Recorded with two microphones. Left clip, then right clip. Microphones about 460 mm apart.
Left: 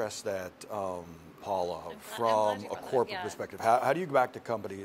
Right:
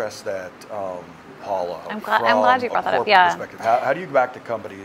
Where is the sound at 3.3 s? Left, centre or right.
Left.